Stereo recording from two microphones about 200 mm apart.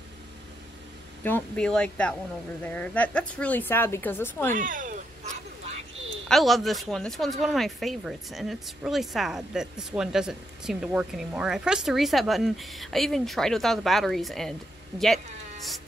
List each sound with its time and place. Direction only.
1.2 s a woman's voice: 5° left (ahead or behind)
4.6 s a sound: 40° right (ahead or behind)
6.2 s speech: centre (ahead or behind)